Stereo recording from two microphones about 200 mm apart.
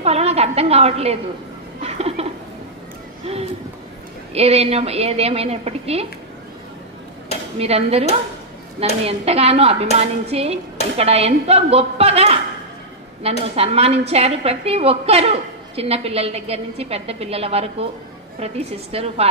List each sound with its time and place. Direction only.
0.0 s a woman's voice: 30° right (ahead or behind)
1.8 s a sound: 30° right (ahead or behind)
4.3 s a woman's voice: 30° right (ahead or behind)
7.5 s a woman's voice: 30° right (ahead or behind)
9.0 s a woman's voice: 30° right (ahead or behind)